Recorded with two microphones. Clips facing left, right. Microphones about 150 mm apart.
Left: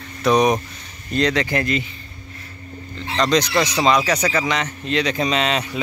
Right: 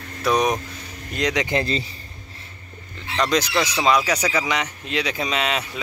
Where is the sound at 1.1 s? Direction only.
15° right (ahead or behind); by 1.9 s 30° right (ahead or behind).